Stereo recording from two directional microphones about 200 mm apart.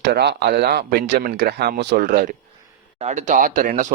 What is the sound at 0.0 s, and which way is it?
Speech, 55° right (ahead or behind).